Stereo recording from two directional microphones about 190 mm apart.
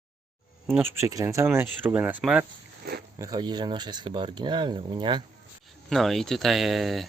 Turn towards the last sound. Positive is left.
turn(degrees=0)  # may be behind; listen again after turning